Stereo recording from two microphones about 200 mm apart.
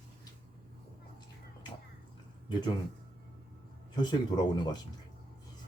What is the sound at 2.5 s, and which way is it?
Speech, 20° left (ahead or behind).